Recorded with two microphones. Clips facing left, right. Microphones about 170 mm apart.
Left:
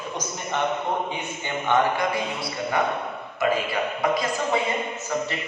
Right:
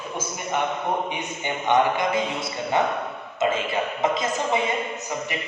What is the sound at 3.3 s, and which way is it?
Speech, 20° right (ahead or behind).